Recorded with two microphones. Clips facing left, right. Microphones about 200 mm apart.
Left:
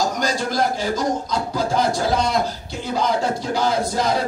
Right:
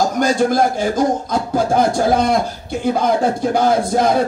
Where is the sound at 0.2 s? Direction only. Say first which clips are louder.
Right 7 dB; 50° right (ahead or behind).